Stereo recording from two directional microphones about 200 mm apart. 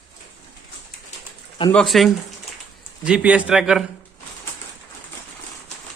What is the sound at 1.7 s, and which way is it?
Speech, centre (ahead or behind).